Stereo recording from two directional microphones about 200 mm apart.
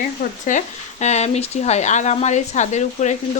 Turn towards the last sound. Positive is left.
turn(degrees=35)  # may be behind; listen again after turning